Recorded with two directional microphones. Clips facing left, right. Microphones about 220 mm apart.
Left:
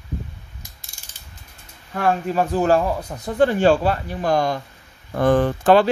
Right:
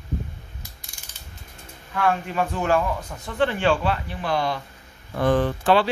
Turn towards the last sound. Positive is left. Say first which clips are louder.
# left 5 dB
turn(degrees=45)  # may be behind; listen again after turning